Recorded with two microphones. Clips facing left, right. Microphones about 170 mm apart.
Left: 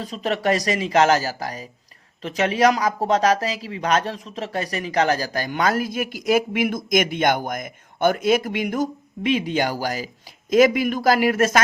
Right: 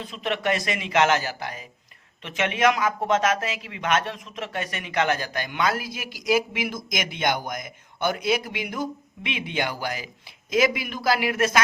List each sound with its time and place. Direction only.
0.0 s speech: 40° left (ahead or behind)